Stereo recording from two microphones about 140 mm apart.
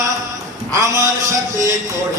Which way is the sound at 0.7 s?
25° right (ahead or behind).